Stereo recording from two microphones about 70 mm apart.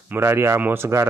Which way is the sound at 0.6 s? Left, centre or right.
Right.